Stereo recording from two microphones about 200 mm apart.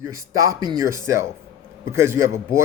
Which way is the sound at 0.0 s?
15° right (ahead or behind).